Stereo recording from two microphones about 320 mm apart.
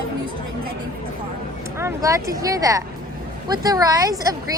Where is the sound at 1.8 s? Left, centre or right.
Centre.